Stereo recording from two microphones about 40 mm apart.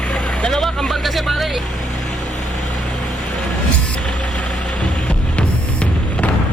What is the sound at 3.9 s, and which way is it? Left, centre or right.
Vehicle, left.